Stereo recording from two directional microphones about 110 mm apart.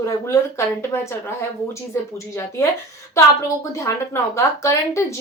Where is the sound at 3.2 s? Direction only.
30° left (ahead or behind).